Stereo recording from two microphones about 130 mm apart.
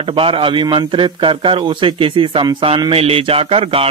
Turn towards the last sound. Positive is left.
turn(degrees=-45)  # may be behind; listen again after turning